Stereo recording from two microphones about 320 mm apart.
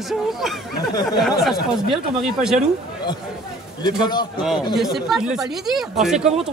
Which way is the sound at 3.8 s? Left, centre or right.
Centre.